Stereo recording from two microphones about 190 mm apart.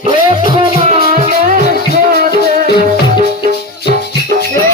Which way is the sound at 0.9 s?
35° right (ahead or behind).